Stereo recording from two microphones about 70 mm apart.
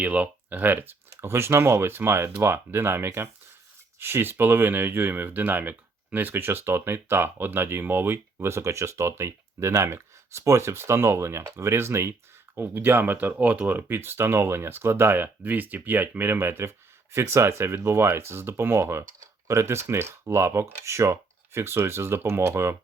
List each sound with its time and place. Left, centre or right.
0.0 s speech: centre; by 22.7 s right